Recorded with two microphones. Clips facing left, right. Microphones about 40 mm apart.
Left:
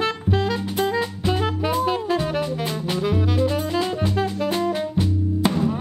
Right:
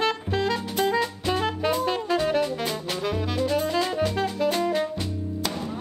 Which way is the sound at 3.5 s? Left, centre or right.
Centre.